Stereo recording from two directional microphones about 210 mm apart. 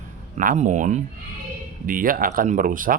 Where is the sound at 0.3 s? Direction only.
35° right (ahead or behind).